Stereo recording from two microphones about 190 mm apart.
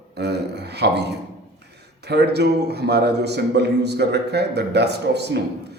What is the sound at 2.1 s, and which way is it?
A man's voice, 60° right (ahead or behind).